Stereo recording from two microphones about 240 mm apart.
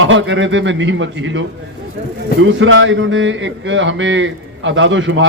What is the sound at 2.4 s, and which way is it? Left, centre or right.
Speech, right.